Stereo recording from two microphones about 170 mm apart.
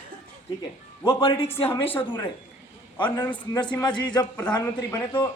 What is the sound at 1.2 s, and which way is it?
Speech, 35° left (ahead or behind).